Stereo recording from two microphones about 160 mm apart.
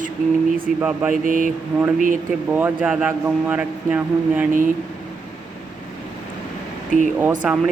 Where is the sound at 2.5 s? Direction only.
10° right (ahead or behind).